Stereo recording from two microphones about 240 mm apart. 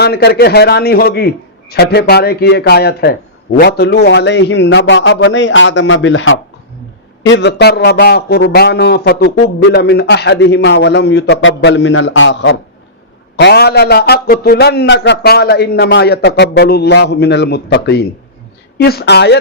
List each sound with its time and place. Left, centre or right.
0.0 s a man's voice: left